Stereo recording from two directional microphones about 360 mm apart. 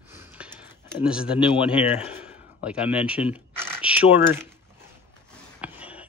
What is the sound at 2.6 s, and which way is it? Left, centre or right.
Speech, centre.